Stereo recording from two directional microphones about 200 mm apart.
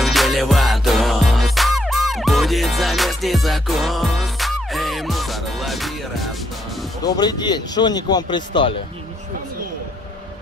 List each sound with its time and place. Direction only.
0.0 s music: centre (ahead or behind)
7.1 s speech: 20° left (ahead or behind)